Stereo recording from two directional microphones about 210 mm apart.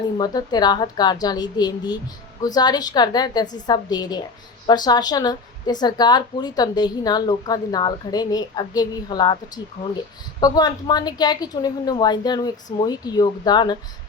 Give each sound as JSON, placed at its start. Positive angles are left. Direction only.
{"t": 0.2, "sound": "a woman's voice", "side_deg": 20}
{"t": 10.4, "sound": "a woman's voice", "side_deg": 20}